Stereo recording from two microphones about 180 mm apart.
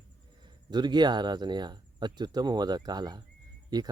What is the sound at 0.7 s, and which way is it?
Speech, 25° right (ahead or behind).